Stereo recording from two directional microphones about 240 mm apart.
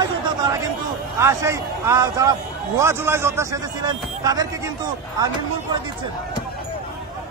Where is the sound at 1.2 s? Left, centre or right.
Centre.